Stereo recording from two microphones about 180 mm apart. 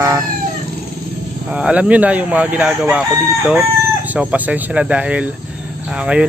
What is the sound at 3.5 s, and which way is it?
Chicken, 10° right (ahead or behind).